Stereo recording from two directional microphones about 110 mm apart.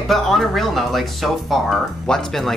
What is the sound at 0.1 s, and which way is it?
Speech, centre (ahead or behind).